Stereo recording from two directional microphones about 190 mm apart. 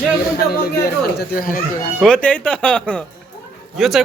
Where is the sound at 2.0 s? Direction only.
5° left (ahead or behind).